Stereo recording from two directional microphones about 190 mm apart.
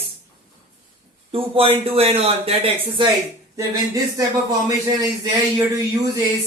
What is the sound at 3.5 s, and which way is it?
Speech, 15° right (ahead or behind).